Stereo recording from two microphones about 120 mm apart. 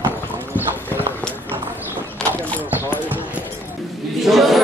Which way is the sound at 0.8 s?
15° left (ahead or behind).